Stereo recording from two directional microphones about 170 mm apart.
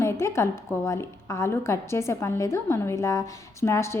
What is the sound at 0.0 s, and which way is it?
A woman's voice, 15° left (ahead or behind).